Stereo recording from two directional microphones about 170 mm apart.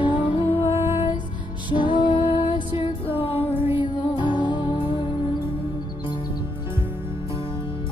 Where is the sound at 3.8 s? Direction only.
25° left (ahead or behind).